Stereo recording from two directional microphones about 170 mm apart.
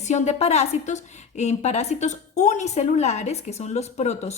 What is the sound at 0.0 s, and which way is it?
A woman's voice, 45° left (ahead or behind).